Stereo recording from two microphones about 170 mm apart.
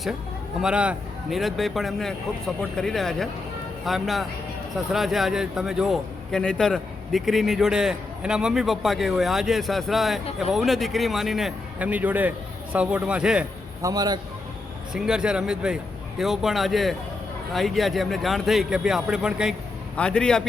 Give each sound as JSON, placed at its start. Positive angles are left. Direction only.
{"t": 0.6, "sound": "a man's voice", "side_deg": -5}
{"t": 13.8, "sound": "a man's voice", "side_deg": -25}
{"t": 14.9, "sound": "a man's voice", "side_deg": -5}